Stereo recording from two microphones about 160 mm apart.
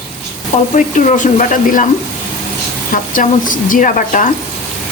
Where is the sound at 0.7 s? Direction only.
50° left (ahead or behind).